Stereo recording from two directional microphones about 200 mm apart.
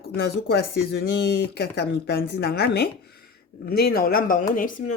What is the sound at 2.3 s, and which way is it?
Speech, 55° left (ahead or behind).